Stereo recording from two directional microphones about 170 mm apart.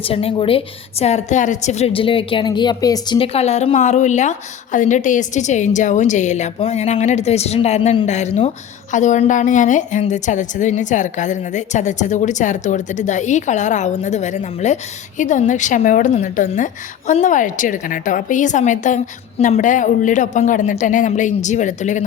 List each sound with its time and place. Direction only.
0.0 s a woman's voice: 35° left (ahead or behind)